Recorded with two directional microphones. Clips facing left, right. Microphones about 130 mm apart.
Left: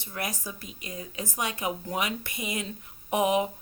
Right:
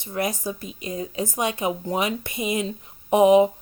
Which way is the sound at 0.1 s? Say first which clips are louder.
Right 9 dB; 25° right (ahead or behind).